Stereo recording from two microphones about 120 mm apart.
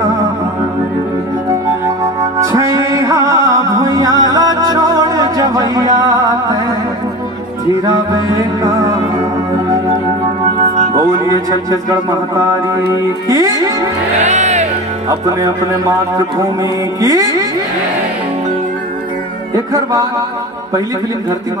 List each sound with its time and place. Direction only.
2.4 s music: 25° right (ahead or behind)
7.8 s music: 30° right (ahead or behind)
13.3 s music: 30° right (ahead or behind)
14.2 s music: 75° right (ahead or behind)
15.0 s music: 30° right (ahead or behind)
17.0 s music: 30° right (ahead or behind)
19.5 s music: 30° right (ahead or behind)